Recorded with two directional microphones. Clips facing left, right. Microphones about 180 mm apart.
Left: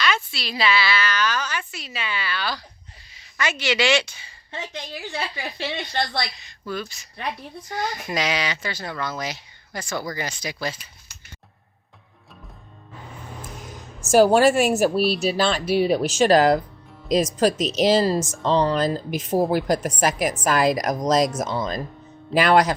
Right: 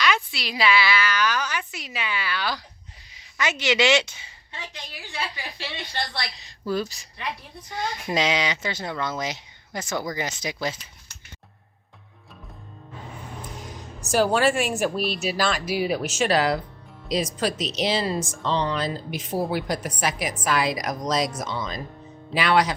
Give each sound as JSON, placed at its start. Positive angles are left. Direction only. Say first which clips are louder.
{"t": 0.0, "sound": "a woman's voice", "louder": "even", "side_deg": -15}
{"t": 5.4, "sound": "speech", "louder": "left 6 dB", "side_deg": 50}
{"t": 6.4, "sound": "a woman's voice", "louder": "right 4 dB", "side_deg": -35}
{"t": 7.7, "sound": "speech", "louder": "even", "side_deg": -25}
{"t": 14.0, "sound": "speech", "louder": "left 6 dB", "side_deg": 45}